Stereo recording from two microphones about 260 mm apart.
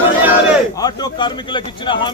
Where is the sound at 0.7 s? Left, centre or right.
Centre.